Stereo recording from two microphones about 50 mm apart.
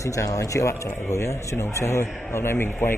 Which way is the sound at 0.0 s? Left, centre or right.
Left.